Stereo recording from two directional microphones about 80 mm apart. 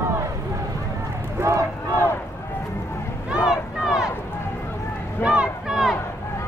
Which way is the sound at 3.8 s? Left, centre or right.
Centre.